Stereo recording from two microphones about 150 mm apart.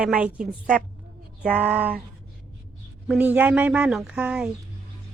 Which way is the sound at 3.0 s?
10° right (ahead or behind).